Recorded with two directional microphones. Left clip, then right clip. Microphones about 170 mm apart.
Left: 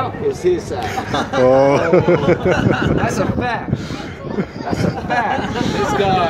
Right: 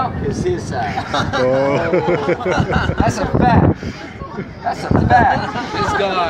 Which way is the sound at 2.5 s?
Centre (ahead or behind).